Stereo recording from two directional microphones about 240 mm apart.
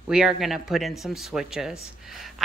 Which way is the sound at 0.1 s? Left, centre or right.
Centre.